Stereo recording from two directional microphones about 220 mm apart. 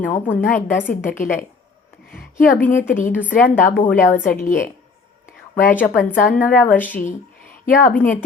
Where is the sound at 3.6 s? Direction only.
40° left (ahead or behind).